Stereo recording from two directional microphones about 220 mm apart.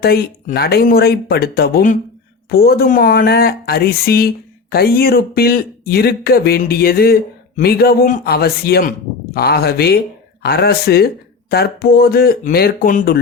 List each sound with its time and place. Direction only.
0.0 s speech: 45° left (ahead or behind)